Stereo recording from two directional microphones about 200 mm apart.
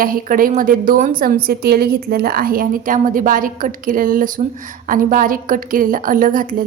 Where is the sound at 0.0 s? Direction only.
45° right (ahead or behind).